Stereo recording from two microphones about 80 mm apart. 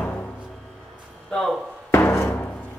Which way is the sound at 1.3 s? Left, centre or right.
Centre.